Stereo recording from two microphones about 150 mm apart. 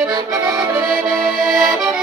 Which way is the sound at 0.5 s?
20° right (ahead or behind).